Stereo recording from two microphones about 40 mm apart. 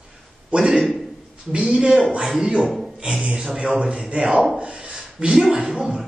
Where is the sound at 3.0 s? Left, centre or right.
Right.